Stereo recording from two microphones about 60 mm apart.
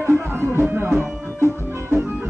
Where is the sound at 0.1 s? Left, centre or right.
Right.